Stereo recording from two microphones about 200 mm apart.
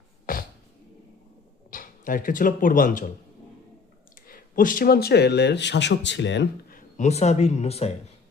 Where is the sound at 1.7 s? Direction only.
45° left (ahead or behind).